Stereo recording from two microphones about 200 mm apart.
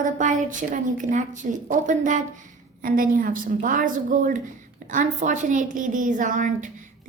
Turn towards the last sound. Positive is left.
turn(degrees=-40)  # may be behind; listen again after turning